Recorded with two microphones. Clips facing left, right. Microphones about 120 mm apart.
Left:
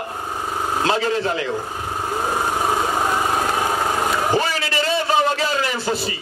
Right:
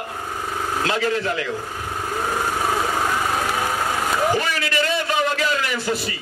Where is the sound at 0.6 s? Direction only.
25° left (ahead or behind).